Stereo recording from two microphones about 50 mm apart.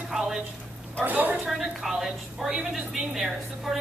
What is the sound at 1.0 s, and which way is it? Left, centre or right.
Speech, right.